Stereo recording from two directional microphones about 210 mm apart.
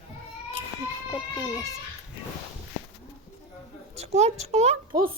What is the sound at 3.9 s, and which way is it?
Speech, 30° right (ahead or behind).